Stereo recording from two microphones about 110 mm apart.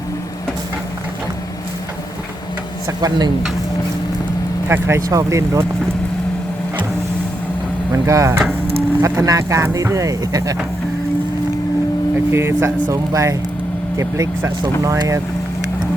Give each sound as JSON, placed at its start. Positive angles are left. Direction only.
{"t": 2.8, "sound": "speech", "side_deg": -35}
{"t": 4.7, "sound": "speech", "side_deg": -25}
{"t": 8.0, "sound": "speech", "side_deg": -30}
{"t": 12.3, "sound": "speech", "side_deg": -20}